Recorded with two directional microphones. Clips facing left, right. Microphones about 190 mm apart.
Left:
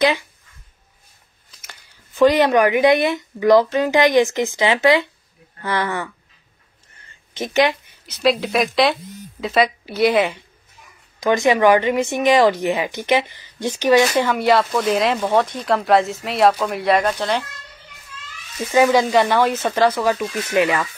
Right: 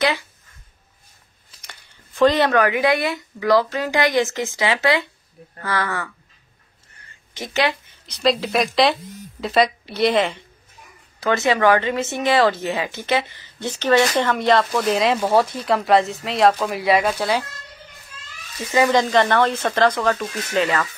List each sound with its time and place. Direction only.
0.0 s speech: 15° left (ahead or behind)
1.6 s speech: 5° left (ahead or behind)
7.3 s speech: 20° left (ahead or behind)
8.1 s speech: centre (ahead or behind)
18.7 s speech: 10° left (ahead or behind)